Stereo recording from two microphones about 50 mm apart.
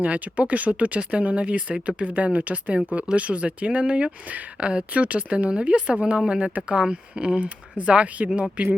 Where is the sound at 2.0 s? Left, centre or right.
Right.